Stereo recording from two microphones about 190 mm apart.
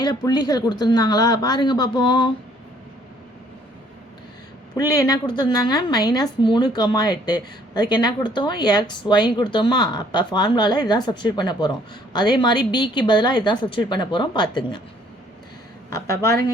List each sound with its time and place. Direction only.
0.0 s speech: 20° left (ahead or behind)
4.7 s speech: 20° left (ahead or behind)